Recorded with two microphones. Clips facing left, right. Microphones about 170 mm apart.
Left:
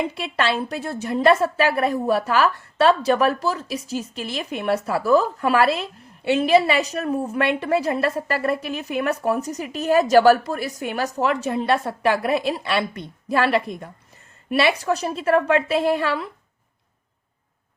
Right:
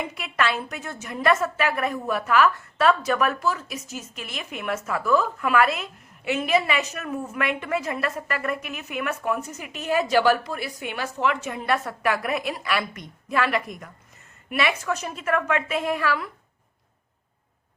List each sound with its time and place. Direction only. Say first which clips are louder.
0.0 s a woman's voice: left 3 dB; 30° left (ahead or behind)